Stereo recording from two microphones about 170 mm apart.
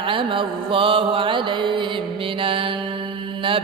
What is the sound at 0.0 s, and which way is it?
Mantra, 30° right (ahead or behind).